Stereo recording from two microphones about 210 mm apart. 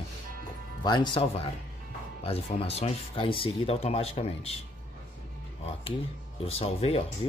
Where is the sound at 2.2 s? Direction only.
30° left (ahead or behind).